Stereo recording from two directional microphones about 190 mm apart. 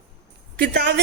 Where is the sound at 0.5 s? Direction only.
60° right (ahead or behind).